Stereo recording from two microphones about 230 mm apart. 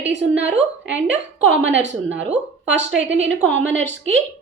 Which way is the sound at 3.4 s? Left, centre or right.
Right.